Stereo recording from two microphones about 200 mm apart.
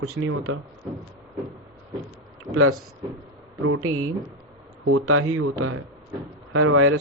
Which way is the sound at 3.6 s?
90° right.